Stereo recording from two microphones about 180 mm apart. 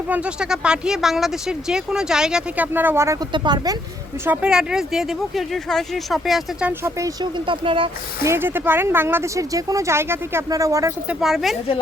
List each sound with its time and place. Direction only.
0.1 s speech: 5° right (ahead or behind); by 3.8 s 25° right (ahead or behind)
4.3 s speech: 5° right (ahead or behind); by 7.9 s 30° right (ahead or behind)
8.2 s speech: 15° right (ahead or behind)
11.1 s speech: centre (ahead or behind)